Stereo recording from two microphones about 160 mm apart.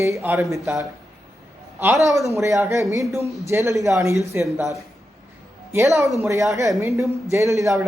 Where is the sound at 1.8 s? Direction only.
15° right (ahead or behind).